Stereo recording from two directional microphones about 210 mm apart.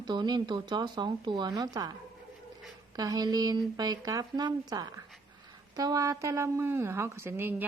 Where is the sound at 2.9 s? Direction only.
15° right (ahead or behind).